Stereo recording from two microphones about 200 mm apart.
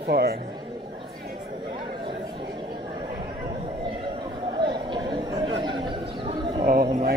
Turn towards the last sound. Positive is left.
turn(degrees=-40)  # may be behind; listen again after turning